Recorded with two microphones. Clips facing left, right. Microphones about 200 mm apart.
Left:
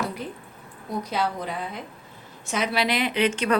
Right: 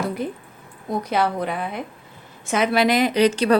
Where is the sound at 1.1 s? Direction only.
60° right (ahead or behind).